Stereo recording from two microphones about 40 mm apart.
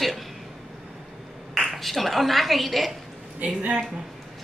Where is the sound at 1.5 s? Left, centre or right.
Centre.